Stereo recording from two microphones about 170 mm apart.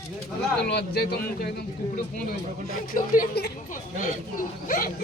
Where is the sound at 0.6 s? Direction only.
75° left (ahead or behind).